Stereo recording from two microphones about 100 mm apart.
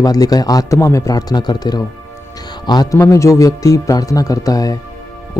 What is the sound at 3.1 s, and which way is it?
Speech, 30° left (ahead or behind).